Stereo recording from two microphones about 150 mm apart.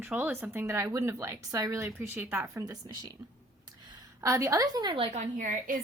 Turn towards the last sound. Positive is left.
turn(degrees=-65)  # may be behind; listen again after turning